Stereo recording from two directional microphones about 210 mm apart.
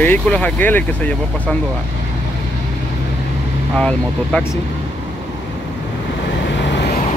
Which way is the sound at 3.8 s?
5° left (ahead or behind).